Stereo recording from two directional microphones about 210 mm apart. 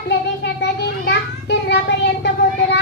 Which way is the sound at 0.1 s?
55° left (ahead or behind).